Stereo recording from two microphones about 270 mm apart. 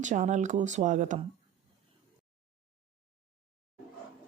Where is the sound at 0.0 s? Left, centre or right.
Right.